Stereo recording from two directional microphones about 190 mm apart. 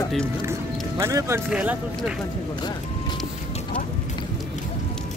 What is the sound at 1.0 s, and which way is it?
Speech, 15° right (ahead or behind).